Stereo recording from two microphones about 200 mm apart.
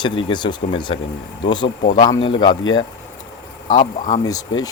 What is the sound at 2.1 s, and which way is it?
Speech, 70° left (ahead or behind).